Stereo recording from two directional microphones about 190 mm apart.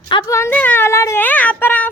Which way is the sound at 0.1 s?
20° left (ahead or behind).